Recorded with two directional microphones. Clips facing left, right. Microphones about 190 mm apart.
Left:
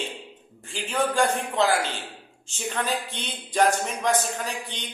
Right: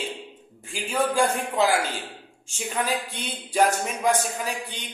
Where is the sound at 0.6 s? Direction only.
10° right (ahead or behind).